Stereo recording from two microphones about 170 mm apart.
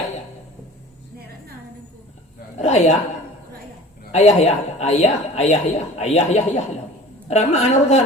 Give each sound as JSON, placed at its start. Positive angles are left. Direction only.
{"t": 2.6, "sound": "a woman's voice", "side_deg": 40}
{"t": 4.1, "sound": "speech", "side_deg": 40}